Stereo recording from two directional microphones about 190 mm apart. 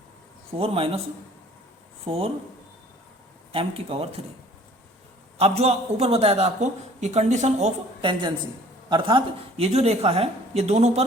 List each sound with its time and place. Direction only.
0.5 s a man's voice: 30° right (ahead or behind)
2.0 s a man's voice: 30° right (ahead or behind)
3.5 s a man's voice: 30° right (ahead or behind)
5.4 s a man's voice: 35° right (ahead or behind)